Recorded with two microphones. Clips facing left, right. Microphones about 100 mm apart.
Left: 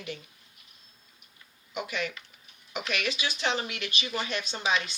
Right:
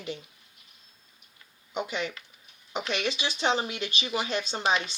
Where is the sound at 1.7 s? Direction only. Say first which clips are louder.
Right 2 dB; 25° right (ahead or behind).